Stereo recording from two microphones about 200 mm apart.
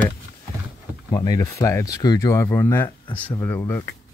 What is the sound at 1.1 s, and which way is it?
Speech, 20° left (ahead or behind).